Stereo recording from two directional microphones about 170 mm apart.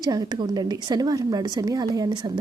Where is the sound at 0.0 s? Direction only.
25° right (ahead or behind).